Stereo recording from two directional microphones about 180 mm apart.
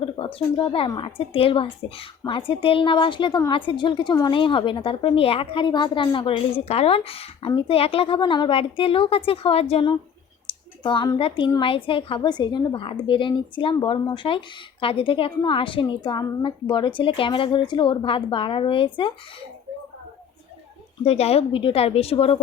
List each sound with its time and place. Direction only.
0.3 s a woman's voice: 25° left (ahead or behind)
21.0 s a woman's voice: 35° left (ahead or behind)